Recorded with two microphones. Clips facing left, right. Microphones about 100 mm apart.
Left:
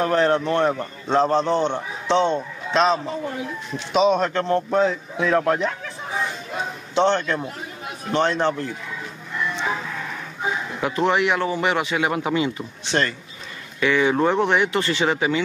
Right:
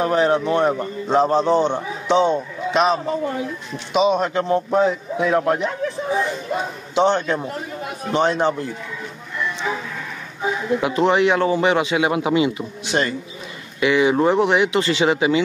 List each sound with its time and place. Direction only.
0.0 s a man's voice: 10° right (ahead or behind)
7.0 s a man's voice: 15° right (ahead or behind)
10.8 s a man's voice: 20° right (ahead or behind)